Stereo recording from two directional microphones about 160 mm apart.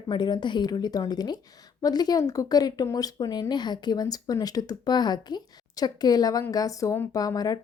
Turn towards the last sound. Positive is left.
turn(degrees=25)  # may be behind; listen again after turning